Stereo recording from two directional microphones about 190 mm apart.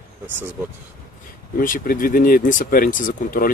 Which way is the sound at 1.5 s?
45° left (ahead or behind).